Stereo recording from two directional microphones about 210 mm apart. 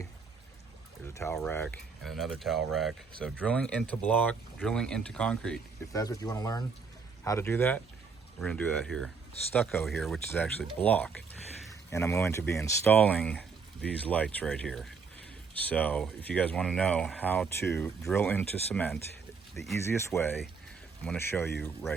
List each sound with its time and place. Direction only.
1.1 s speech: 15° left (ahead or behind)
5.9 s speech: 15° left (ahead or behind)
20.1 s speech: 10° left (ahead or behind)